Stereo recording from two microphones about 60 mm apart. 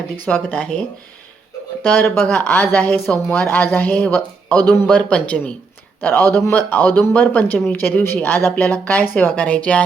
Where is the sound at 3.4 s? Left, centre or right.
Left.